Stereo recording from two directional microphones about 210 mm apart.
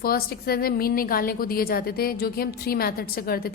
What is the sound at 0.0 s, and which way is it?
A woman's voice, 45° left (ahead or behind).